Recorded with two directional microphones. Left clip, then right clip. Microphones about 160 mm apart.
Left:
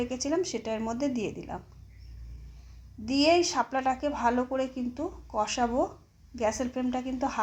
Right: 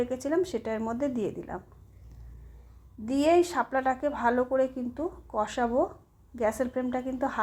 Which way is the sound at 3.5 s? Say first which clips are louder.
Even; 30° right (ahead or behind).